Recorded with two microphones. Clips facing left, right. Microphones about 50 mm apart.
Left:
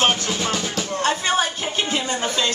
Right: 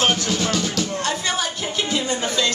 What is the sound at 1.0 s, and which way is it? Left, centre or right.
Speech, left.